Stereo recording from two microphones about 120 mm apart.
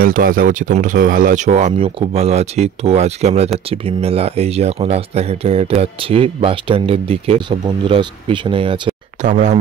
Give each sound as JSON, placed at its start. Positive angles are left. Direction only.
{"t": 0.5, "sound": "speech", "side_deg": -90}
{"t": 2.0, "sound": "speech", "side_deg": -60}
{"t": 3.5, "sound": "speech", "side_deg": -55}
{"t": 9.2, "sound": "speech", "side_deg": -90}